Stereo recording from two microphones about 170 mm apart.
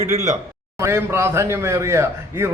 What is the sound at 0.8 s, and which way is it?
Speech, 15° right (ahead or behind).